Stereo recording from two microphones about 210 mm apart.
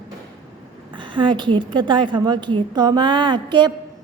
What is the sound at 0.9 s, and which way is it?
A woman's voice, 25° right (ahead or behind).